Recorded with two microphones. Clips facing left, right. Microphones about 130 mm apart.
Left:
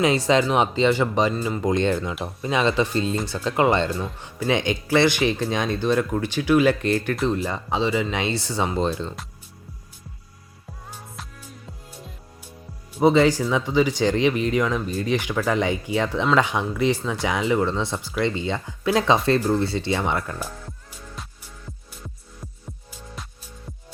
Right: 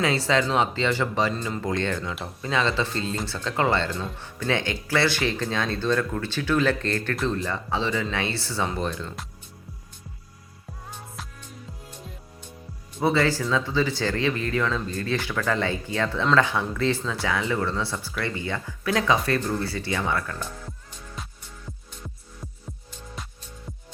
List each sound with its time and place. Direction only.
0.0 s speech: 15° left (ahead or behind)
13.0 s speech: 20° left (ahead or behind)